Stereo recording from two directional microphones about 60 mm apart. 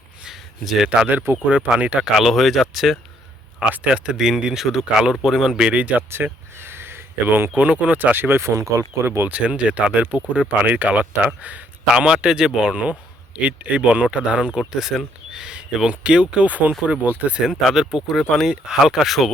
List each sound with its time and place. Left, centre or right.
0.3 s a sound: centre
1.0 s speech: right
2.1 s speech: centre
3.7 s speech: centre
6.1 s a sound: right
7.5 s speech: right
9.0 s speech: right
9.3 s speech: right
11.9 s speech: centre
14.7 s speech: centre; by 17.4 s right
17.7 s speech: centre
18.4 s speech: centre